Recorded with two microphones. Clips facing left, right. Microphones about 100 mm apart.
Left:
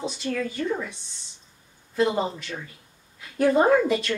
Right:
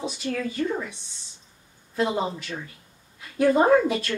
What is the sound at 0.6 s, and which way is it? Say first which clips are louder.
Speech: right 1 dB; 15° right (ahead or behind).